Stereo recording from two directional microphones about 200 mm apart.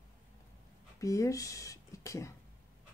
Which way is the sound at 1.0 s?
15° left (ahead or behind).